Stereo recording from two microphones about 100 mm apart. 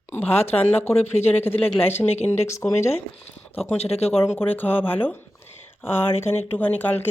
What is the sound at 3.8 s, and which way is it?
Speech, 90° left.